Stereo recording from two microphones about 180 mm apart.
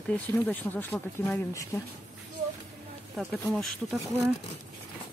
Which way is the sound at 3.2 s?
Centre (ahead or behind).